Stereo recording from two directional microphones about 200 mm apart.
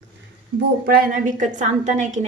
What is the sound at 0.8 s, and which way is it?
A woman's voice, 50° right (ahead or behind).